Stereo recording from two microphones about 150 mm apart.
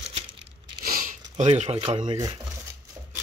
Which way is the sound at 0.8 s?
70° right (ahead or behind).